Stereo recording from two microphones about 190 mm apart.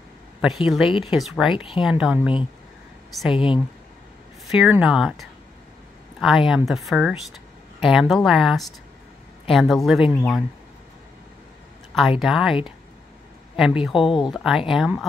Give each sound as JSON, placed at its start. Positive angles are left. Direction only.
{"t": 0.4, "sound": "speech", "side_deg": 0}
{"t": 1.5, "sound": "speech", "side_deg": 30}
{"t": 1.8, "sound": "speech", "side_deg": -5}
{"t": 3.3, "sound": "speech", "side_deg": 25}
{"t": 4.5, "sound": "speech", "side_deg": -5}
{"t": 12.2, "sound": "speech", "side_deg": 0}
{"t": 13.6, "sound": "speech", "side_deg": -5}